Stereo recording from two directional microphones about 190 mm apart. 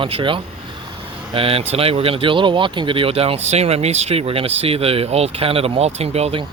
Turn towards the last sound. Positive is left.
turn(degrees=-30)  # may be behind; listen again after turning